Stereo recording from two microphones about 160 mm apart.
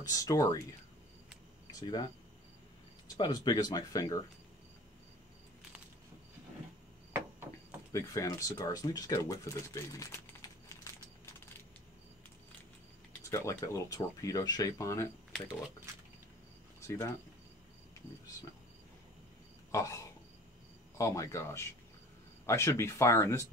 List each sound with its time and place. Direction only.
0.0 s speech: 20° left (ahead or behind)
1.7 s speech: 25° left (ahead or behind)
3.2 s speech: 25° left (ahead or behind)
7.1 s a sound: 15° right (ahead or behind)
7.9 s speech: 20° left (ahead or behind)
10.7 s a sound: 20° left (ahead or behind)
13.2 s speech: 20° left (ahead or behind)
16.8 s speech: 15° left (ahead or behind)
19.7 s speech: 20° left (ahead or behind)